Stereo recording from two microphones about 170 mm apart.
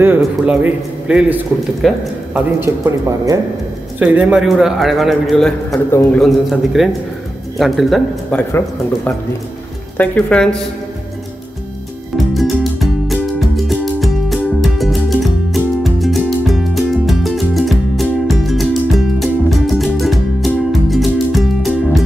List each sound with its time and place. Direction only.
0.0 s a man's voice: 10° right (ahead or behind)
2.6 s a man's voice: 15° right (ahead or behind)
4.0 s a man's voice: 5° right (ahead or behind)
5.7 s speech: 20° left (ahead or behind)
6.1 s a man's voice: centre (ahead or behind)
13.0 s music: centre (ahead or behind)